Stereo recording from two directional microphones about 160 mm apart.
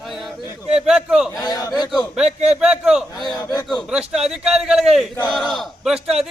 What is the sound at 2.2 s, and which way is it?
Speech, 40° right (ahead or behind).